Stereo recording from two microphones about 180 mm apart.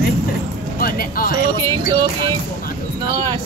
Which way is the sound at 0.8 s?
55° left (ahead or behind).